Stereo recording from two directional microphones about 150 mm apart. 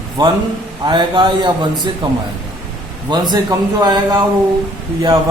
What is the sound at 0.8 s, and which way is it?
Speech, 30° right (ahead or behind).